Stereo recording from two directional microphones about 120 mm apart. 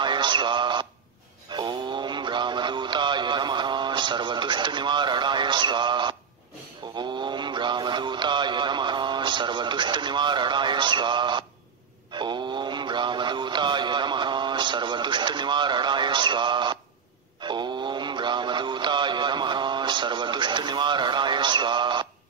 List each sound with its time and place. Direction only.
0.0 s speech: 40° right (ahead or behind)
1.5 s music: 40° right (ahead or behind)
7.0 s mantra: 40° right (ahead or behind)
12.1 s synthetic singing: 40° right (ahead or behind)
17.4 s mantra: 40° right (ahead or behind)